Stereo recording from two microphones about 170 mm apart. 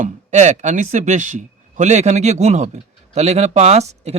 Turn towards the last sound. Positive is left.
turn(degrees=-40)  # may be behind; listen again after turning